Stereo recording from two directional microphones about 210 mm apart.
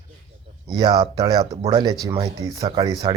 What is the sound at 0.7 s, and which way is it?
Speech, 20° right (ahead or behind).